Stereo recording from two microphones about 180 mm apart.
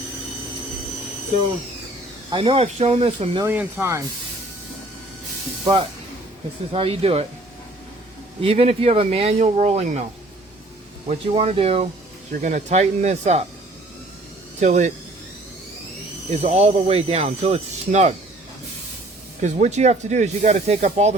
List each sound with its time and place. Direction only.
2.3 s speech: 30° right (ahead or behind)
3.4 s speech: 10° right (ahead or behind)
6.7 s speech: 30° right (ahead or behind)
8.4 s speech: 35° right (ahead or behind)
11.1 s speech: 35° right (ahead or behind)
12.3 s speech: 45° right (ahead or behind)
14.6 s speech: 40° right (ahead or behind)
16.3 s speech: 35° right (ahead or behind)
19.4 s speech: 40° right (ahead or behind)